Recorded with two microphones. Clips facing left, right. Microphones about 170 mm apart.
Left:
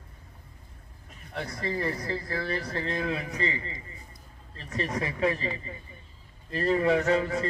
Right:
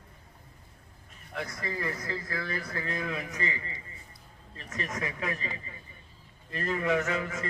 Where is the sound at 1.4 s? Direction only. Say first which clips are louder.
Left 5 dB; 35° left (ahead or behind).